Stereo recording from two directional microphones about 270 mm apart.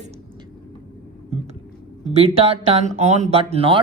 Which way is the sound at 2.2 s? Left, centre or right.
Right.